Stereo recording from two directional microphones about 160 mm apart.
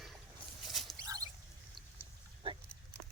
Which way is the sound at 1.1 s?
20° right (ahead or behind).